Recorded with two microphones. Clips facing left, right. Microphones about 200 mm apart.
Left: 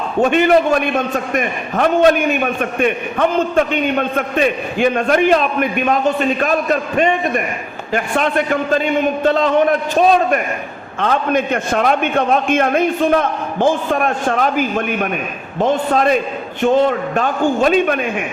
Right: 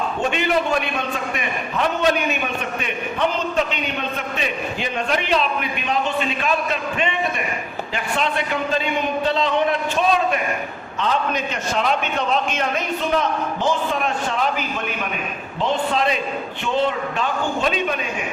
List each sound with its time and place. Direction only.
0.2 s a man's voice: 50° left (ahead or behind)